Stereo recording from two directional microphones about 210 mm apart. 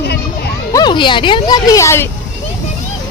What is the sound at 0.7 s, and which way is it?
Music, 20° left (ahead or behind).